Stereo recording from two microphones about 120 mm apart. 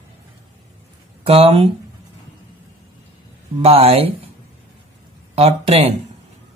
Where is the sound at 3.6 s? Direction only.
55° right (ahead or behind).